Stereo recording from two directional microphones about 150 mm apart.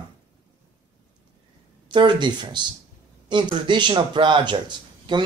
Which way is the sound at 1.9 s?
30° right (ahead or behind).